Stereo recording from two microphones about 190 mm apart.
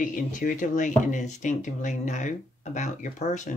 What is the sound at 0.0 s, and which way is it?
Speech, 45° left (ahead or behind).